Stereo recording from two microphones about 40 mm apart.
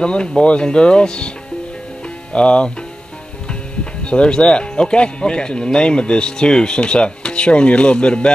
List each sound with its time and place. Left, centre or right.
0.0 s speech: left
2.3 s speech: left